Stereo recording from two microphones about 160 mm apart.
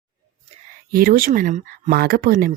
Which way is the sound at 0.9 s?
70° right (ahead or behind).